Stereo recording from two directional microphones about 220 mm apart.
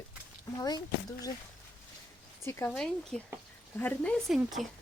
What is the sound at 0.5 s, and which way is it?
Speech, 15° left (ahead or behind).